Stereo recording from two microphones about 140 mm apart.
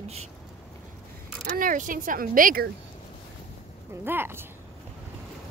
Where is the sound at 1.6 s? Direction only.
75° right (ahead or behind).